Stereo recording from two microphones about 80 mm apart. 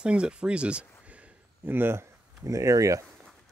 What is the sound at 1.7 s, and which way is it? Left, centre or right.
Speech, right.